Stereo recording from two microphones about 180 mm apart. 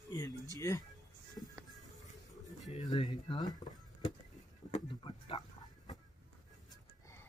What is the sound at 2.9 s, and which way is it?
Speech, 25° left (ahead or behind).